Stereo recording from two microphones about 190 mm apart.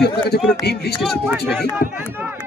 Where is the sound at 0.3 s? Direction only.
60° left (ahead or behind).